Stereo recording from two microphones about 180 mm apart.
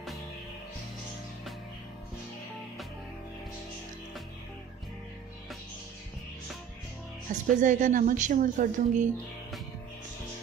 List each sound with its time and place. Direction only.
7.3 s a woman's voice: 45° right (ahead or behind)